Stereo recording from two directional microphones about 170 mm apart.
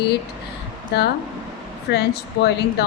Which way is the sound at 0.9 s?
90° left.